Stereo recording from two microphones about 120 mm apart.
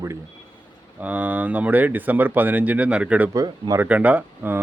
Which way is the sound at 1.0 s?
15° right (ahead or behind).